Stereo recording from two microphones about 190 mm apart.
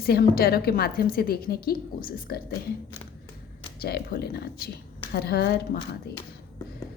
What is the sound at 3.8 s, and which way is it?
Speech, 55° left (ahead or behind).